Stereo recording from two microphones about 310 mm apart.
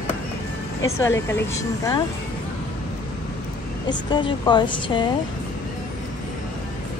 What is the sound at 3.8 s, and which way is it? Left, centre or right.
A woman's voice, centre.